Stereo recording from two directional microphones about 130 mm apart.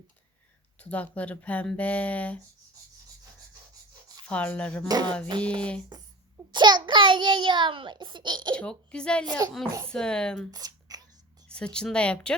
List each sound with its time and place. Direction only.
0.8 s speech: 10° left (ahead or behind)
4.3 s speech: 10° left (ahead or behind)
4.9 s a child's voice: 30° right (ahead or behind)
5.4 s speech: 10° left (ahead or behind)
6.5 s a child's voice: 35° right (ahead or behind)
8.5 s speech: 10° left (ahead or behind)
10.5 s a sound: 30° right (ahead or behind)
11.4 s speech: 5° left (ahead or behind)